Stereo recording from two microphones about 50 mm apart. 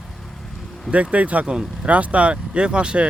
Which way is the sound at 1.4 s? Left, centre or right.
Centre.